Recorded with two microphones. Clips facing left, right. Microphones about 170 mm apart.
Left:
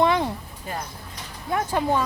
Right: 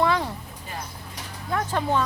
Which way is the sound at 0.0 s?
20° left (ahead or behind).